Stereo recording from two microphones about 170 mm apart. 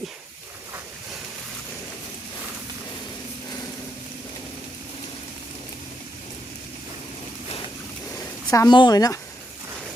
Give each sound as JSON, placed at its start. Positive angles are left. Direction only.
{"t": 8.4, "sound": "a woman's voice", "side_deg": 20}